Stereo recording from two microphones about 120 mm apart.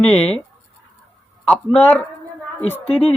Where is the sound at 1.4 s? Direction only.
10° left (ahead or behind).